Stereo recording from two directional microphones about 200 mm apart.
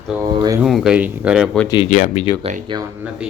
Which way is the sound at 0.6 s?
Centre (ahead or behind).